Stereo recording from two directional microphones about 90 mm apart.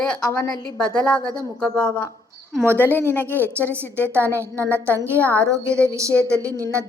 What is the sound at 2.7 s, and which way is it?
Speech, 20° left (ahead or behind).